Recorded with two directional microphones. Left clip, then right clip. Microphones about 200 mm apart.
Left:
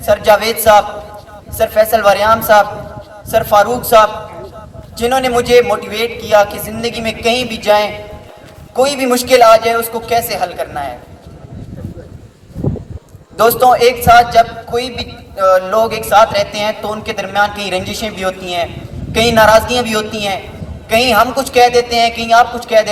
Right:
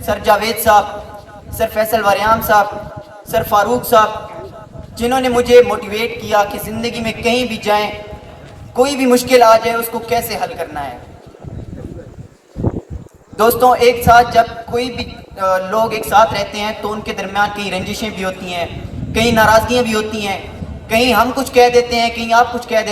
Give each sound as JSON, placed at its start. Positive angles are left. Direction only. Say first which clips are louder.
{"t": 0.0, "sound": "a man's voice", "louder": "left 4 dB", "side_deg": 40}
{"t": 13.3, "sound": "a man's voice", "louder": "left 2 dB", "side_deg": 40}